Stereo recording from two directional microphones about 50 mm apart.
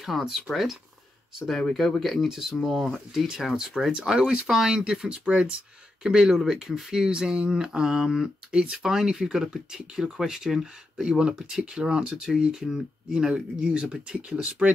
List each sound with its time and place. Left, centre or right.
0.0 s speech: centre
2.2 s speech: centre; by 14.7 s right